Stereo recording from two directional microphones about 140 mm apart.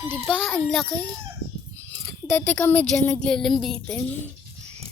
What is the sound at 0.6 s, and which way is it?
A child's voice, 5° left (ahead or behind).